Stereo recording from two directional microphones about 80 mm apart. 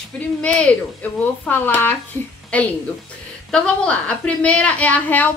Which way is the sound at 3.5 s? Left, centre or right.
Centre.